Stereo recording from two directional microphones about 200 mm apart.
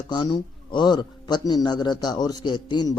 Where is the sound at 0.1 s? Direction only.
20° left (ahead or behind).